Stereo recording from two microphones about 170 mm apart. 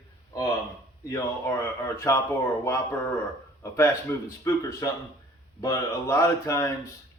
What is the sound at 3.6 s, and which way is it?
Speech, 15° left (ahead or behind).